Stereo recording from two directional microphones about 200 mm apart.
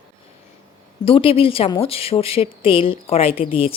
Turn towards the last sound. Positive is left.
turn(degrees=30)  # may be behind; listen again after turning